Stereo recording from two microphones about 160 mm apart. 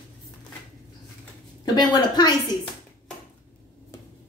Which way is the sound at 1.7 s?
25° left (ahead or behind).